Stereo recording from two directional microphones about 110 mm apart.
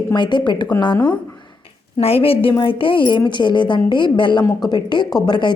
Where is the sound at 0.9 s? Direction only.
15° left (ahead or behind).